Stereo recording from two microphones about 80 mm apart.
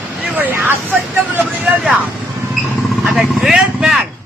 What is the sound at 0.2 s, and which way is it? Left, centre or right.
Vehicle, centre.